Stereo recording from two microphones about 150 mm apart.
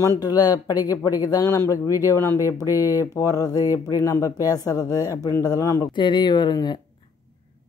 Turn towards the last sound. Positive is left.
turn(degrees=30)  # may be behind; listen again after turning